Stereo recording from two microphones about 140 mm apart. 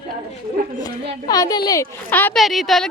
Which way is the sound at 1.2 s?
25° left (ahead or behind).